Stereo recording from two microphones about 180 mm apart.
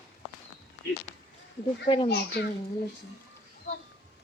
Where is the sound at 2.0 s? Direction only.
65° left (ahead or behind).